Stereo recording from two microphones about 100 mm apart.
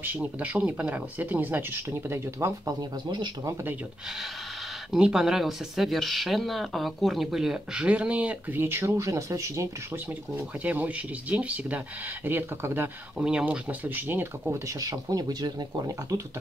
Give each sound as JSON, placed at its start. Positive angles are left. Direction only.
{"t": 0.0, "sound": "speech", "side_deg": -15}
{"t": 4.9, "sound": "speech", "side_deg": -5}
{"t": 10.3, "sound": "speech", "side_deg": -15}
{"t": 13.2, "sound": "speech", "side_deg": -10}
{"t": 14.8, "sound": "speech", "side_deg": -40}